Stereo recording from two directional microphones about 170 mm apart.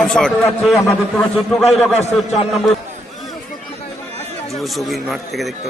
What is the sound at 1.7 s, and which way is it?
Speech, 40° left (ahead or behind).